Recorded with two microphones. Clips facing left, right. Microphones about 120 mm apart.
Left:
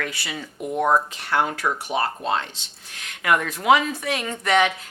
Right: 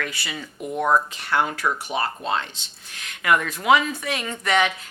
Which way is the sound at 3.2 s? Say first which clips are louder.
Even; 50° left (ahead or behind).